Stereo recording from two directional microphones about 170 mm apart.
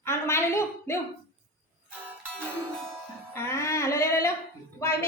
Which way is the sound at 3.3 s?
15° left (ahead or behind).